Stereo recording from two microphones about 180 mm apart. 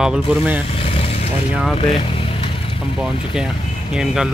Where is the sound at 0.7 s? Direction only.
30° left (ahead or behind).